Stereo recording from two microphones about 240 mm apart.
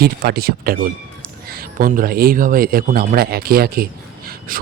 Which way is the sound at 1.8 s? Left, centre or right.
Right.